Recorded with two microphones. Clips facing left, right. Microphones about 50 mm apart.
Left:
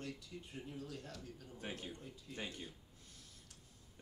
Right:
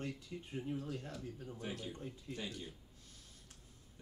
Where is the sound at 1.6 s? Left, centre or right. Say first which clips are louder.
Right 1 dB; left.